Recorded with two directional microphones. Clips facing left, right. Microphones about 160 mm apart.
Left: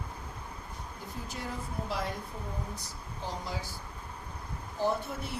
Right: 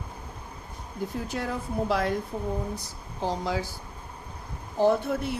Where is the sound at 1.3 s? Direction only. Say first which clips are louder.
Right 8 dB; 80° right.